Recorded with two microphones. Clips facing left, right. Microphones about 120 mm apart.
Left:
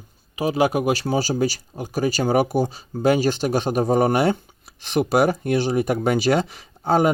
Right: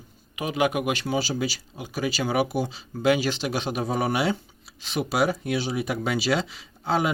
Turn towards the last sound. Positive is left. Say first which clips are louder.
# left 6 dB
turn(degrees=45)  # may be behind; listen again after turning